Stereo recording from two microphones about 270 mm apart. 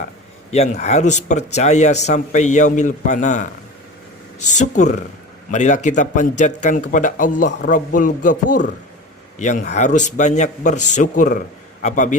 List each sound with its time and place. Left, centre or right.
0.5 s speech: left